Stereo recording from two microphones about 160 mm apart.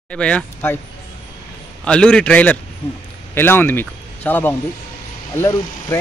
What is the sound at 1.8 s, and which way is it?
Speech, 5° left (ahead or behind).